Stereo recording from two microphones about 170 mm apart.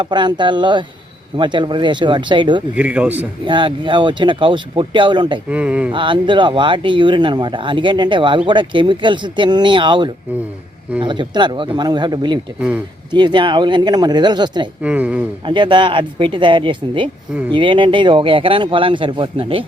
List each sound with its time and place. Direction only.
0.0 s speech: 25° right (ahead or behind)
2.7 s speech: 10° right (ahead or behind)
3.4 s speech: 30° right (ahead or behind)
5.5 s speech: 10° right (ahead or behind)
5.9 s speech: 30° right (ahead or behind)
14.8 s speech: 10° right (ahead or behind)
15.4 s speech: 25° right (ahead or behind)